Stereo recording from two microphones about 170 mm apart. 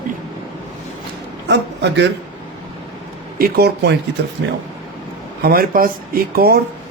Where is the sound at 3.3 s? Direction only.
60° right (ahead or behind).